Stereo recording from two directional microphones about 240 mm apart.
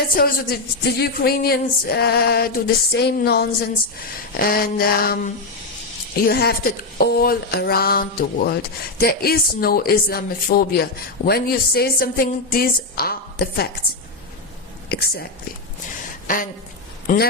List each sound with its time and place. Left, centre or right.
0.1 s speech: left
14.8 s speech: left
16.2 s speech: left